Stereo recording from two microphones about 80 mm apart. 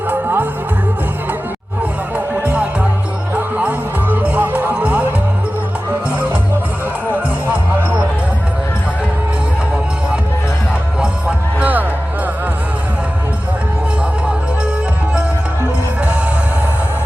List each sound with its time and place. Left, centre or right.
0.1 s music: right
3.3 s music: centre
7.5 s music: right
11.0 s music: centre